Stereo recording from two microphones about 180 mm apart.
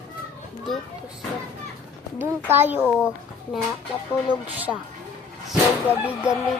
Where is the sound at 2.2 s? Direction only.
10° right (ahead or behind).